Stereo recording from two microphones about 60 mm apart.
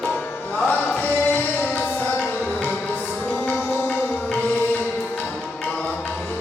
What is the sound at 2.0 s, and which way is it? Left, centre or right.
Tabla, left.